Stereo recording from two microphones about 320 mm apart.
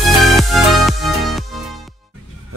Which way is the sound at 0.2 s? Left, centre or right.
Centre.